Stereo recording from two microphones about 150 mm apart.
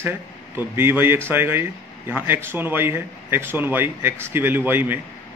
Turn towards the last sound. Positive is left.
turn(degrees=-15)  # may be behind; listen again after turning